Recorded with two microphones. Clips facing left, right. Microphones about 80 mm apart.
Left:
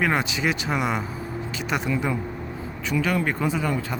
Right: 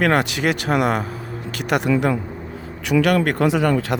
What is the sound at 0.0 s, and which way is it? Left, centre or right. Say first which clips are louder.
Speech: right 5 dB; right.